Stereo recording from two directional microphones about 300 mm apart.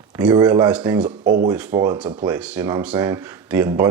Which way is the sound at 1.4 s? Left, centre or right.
Centre.